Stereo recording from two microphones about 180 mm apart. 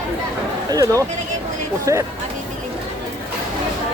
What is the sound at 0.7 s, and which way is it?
Speech, 20° right (ahead or behind).